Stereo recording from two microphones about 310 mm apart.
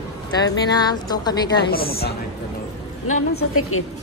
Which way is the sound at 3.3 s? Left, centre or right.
Left.